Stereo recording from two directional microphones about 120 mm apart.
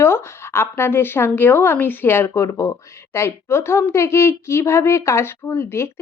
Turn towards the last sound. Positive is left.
turn(degrees=20)  # may be behind; listen again after turning